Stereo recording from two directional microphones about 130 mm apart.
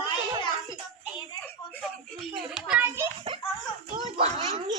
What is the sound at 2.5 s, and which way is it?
Children playing, 5° right (ahead or behind).